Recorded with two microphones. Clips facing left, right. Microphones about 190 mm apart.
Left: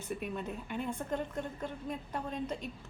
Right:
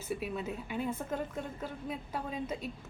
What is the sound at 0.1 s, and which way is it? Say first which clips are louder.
A woman's voice: right 2 dB; 5° right (ahead or behind).